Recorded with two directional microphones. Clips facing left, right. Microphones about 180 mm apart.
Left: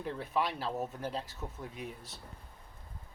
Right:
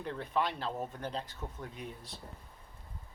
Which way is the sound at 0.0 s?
10° left (ahead or behind).